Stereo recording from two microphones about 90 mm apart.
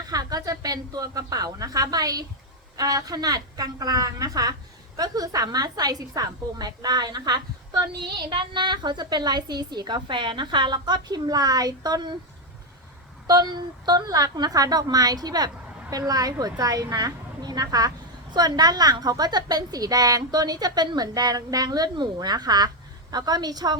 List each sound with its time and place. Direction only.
0.1 s a woman's voice: 45° right (ahead or behind)
13.2 s a woman's voice: 50° right (ahead or behind)